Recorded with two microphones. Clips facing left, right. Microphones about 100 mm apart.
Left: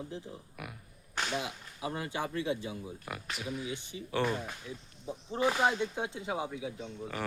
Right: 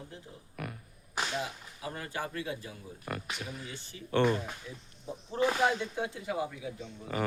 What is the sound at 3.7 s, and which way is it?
Speech, 15° left (ahead or behind).